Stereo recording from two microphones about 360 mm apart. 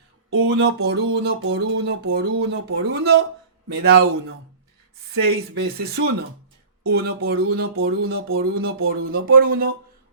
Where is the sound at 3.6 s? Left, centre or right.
Right.